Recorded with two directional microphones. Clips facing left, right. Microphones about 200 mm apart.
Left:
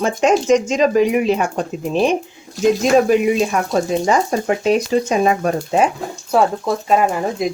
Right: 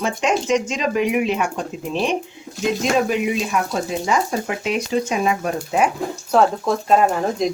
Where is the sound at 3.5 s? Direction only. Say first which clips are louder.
Left 5 dB; 45° left (ahead or behind).